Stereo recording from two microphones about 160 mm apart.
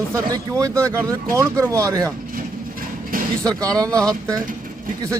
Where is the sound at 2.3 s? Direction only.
60° right (ahead or behind).